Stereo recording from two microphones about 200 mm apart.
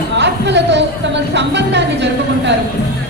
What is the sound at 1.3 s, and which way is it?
Speech, 60° right (ahead or behind).